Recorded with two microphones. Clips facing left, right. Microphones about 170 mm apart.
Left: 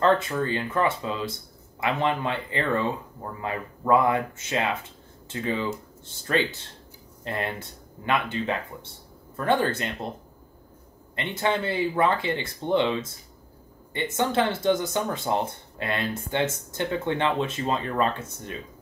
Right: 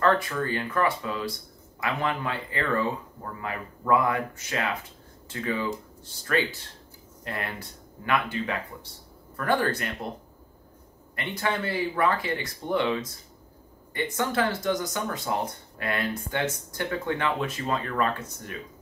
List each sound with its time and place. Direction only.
0.0 s speech: 25° left (ahead or behind)
11.1 s speech: 25° left (ahead or behind)